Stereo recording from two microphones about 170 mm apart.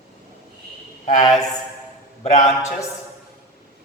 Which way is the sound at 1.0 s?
45° left (ahead or behind).